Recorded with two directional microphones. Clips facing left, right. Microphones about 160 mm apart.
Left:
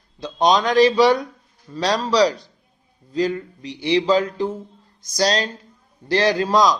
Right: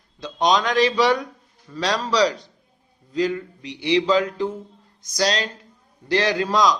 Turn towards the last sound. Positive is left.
turn(degrees=35)  # may be behind; listen again after turning